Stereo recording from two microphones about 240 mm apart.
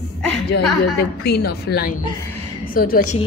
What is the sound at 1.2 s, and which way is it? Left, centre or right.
A woman's voice, left.